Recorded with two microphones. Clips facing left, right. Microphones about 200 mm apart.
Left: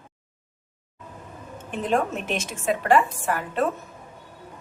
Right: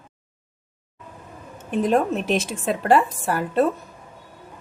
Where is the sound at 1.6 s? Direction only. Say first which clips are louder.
Right 4 dB; 40° right (ahead or behind).